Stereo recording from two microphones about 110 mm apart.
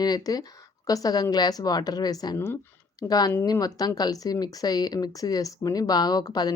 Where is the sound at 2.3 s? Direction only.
20° left (ahead or behind).